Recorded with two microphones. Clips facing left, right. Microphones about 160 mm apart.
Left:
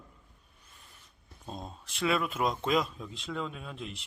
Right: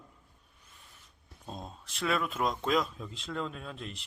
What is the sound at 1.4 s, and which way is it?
Speech, centre (ahead or behind).